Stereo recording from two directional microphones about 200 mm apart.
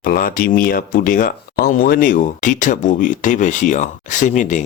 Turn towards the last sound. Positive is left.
turn(degrees=40)  # may be behind; listen again after turning